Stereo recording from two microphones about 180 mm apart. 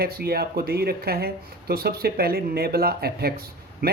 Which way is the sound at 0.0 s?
60° right (ahead or behind).